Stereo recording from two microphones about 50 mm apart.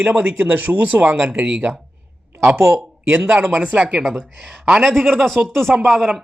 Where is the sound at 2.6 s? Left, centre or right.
Right.